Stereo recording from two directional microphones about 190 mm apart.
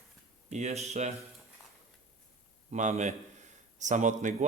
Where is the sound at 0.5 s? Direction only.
35° right (ahead or behind).